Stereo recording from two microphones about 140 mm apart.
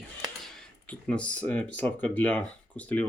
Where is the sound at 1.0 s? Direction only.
10° left (ahead or behind).